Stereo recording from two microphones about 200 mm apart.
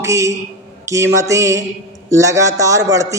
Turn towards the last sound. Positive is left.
turn(degrees=-15)  # may be behind; listen again after turning